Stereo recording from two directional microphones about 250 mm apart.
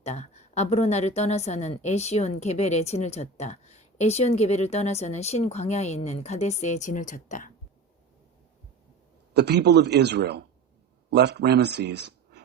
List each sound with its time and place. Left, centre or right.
0.0 s a woman's voice: left
9.3 s speech: right